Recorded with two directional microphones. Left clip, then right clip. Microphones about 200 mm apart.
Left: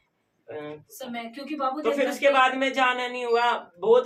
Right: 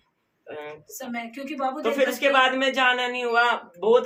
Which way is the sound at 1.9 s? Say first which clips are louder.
Right 1 dB; 45° right (ahead or behind).